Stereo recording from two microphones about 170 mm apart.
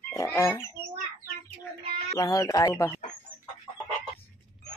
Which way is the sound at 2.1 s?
20° left (ahead or behind).